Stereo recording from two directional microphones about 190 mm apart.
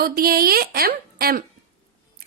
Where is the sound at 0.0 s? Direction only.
50° right (ahead or behind).